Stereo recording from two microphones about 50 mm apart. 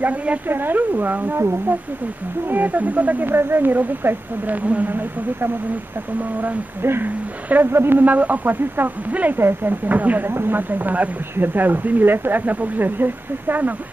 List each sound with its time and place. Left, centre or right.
0.0 s a woman's voice: right
0.5 s speech: right
2.5 s speech: right
4.5 s speech: right
6.8 s speech: right
7.4 s speech: right
7.7 s speech: right
8.0 s speech: right
9.4 s speech: right
10.3 s speech: right